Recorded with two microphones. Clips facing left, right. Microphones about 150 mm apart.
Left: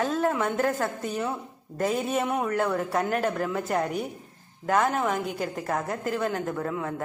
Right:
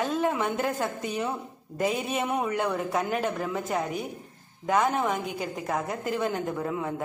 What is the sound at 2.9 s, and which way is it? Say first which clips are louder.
Speech: left 2 dB; centre (ahead or behind).